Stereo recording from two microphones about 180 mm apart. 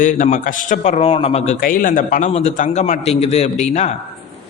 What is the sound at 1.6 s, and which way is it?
A man's voice, 50° left (ahead or behind).